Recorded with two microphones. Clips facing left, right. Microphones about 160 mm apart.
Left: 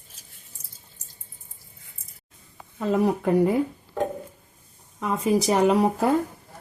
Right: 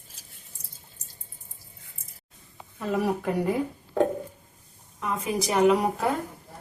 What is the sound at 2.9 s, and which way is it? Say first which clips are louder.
Speech: left 4 dB; 25° left (ahead or behind).